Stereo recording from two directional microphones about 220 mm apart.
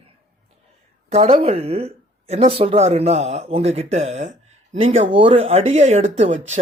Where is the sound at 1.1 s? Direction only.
30° right (ahead or behind).